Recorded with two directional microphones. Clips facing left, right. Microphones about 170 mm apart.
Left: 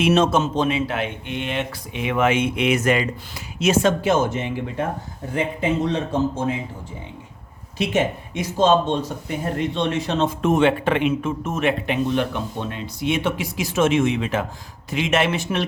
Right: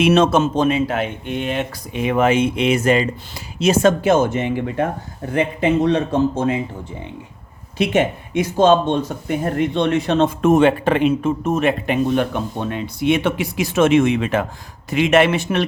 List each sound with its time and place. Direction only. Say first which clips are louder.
0.0 s speech: right 3 dB; 70° right (ahead or behind); by 3.1 s 30° right (ahead or behind)
3.6 s speech: right 3 dB; 45° right (ahead or behind); by 6.6 s 65° right (ahead or behind)
8.4 s speech: right 4 dB; 60° right (ahead or behind)